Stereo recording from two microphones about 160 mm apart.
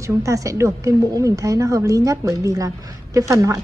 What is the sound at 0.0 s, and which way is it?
Speech, 20° right (ahead or behind).